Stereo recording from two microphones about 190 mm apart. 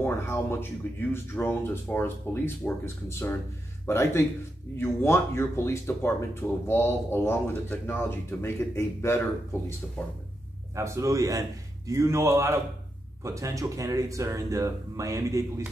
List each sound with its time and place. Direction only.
0.0 s speech: 10° left (ahead or behind)
10.7 s speech: 15° right (ahead or behind)